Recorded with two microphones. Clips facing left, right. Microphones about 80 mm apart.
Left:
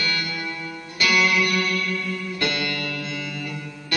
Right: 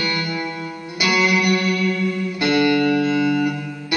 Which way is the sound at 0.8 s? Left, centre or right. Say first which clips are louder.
Right 2 dB; centre.